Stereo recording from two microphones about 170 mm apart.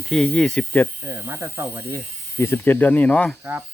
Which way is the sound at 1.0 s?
15° right (ahead or behind).